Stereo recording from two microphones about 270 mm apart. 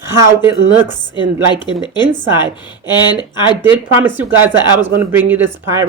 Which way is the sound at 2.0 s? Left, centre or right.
Centre.